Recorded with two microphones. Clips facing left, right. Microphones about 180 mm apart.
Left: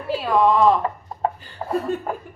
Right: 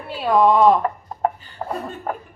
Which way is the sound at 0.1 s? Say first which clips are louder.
Right 2 dB; centre (ahead or behind).